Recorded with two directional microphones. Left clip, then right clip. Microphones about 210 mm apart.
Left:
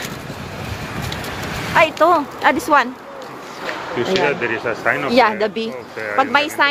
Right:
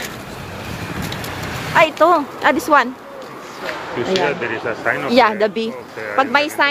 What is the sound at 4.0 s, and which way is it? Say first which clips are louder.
Speech: left 1 dB; 40° left (ahead or behind).